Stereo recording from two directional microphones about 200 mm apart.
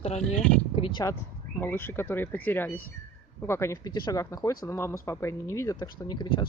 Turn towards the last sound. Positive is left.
turn(degrees=25)  # may be behind; listen again after turning